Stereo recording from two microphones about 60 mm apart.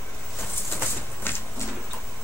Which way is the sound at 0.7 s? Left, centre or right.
Left.